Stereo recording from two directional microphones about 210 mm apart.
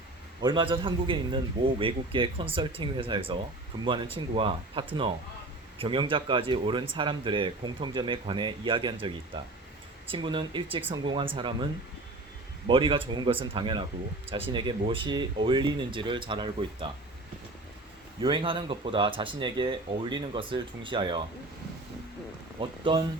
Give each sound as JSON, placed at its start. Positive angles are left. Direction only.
{"t": 0.4, "sound": "speech", "side_deg": -25}
{"t": 18.2, "sound": "speech", "side_deg": -25}
{"t": 22.6, "sound": "speech", "side_deg": -25}